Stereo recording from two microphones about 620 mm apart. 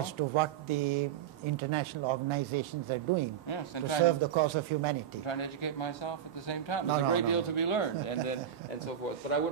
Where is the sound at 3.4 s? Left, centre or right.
Left.